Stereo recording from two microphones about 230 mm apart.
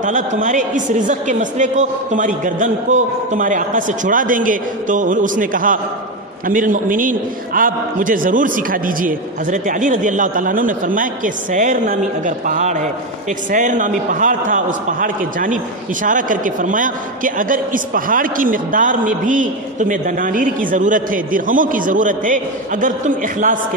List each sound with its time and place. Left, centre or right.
0.0 s a man's voice: right